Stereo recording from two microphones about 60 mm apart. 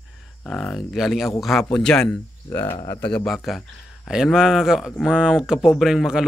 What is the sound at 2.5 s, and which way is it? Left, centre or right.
Speech, left.